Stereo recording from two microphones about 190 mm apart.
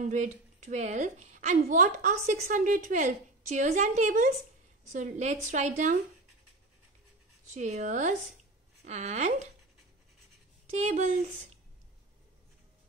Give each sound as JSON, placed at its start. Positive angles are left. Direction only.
{"t": 0.0, "sound": "a woman's voice", "side_deg": -40}
{"t": 7.4, "sound": "a woman's voice", "side_deg": -35}
{"t": 10.7, "sound": "a woman's voice", "side_deg": -35}